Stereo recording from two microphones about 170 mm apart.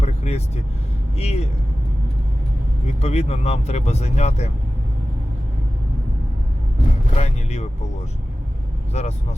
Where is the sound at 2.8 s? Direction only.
40° left (ahead or behind).